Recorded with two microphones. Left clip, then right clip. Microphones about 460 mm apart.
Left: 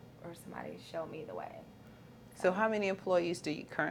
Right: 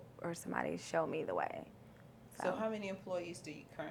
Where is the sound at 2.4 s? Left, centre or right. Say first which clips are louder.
Left 7 dB; left.